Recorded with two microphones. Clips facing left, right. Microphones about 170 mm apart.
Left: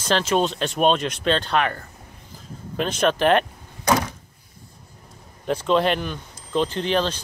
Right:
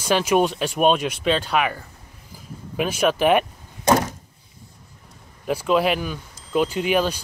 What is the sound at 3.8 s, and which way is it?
Door, 35° right (ahead or behind).